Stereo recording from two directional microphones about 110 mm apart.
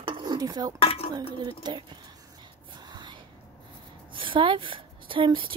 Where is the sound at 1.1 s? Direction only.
40° right (ahead or behind).